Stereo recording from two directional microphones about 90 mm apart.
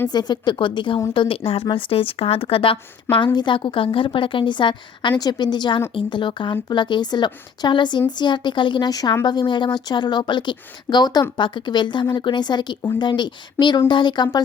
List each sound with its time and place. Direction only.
0.1 s a woman's voice: 50° left (ahead or behind)
1.1 s a woman's voice: 80° left
3.3 s a woman's voice: 60° left (ahead or behind)
8.9 s a woman's voice: 45° left (ahead or behind)
9.2 s a woman's voice: 55° left (ahead or behind)